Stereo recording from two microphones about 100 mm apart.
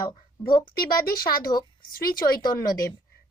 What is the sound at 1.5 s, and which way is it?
A woman's voice, 45° left (ahead or behind).